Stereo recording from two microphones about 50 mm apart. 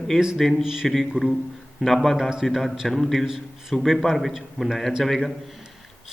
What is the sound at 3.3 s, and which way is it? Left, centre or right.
A man's voice, centre.